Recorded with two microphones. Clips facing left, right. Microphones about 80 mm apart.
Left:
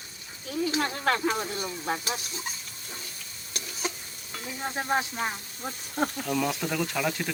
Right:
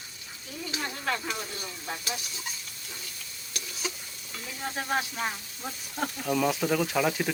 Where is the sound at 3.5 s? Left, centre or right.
Left.